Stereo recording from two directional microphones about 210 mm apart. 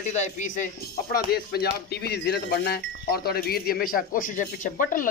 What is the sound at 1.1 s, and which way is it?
A man's voice, 45° left (ahead or behind).